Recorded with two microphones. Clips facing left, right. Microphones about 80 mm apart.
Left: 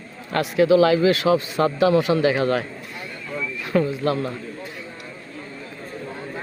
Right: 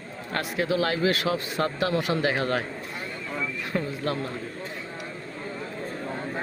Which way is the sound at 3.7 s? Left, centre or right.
Left.